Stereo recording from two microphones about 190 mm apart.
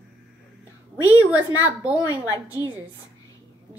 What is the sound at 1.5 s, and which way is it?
A woman's voice, 20° left (ahead or behind).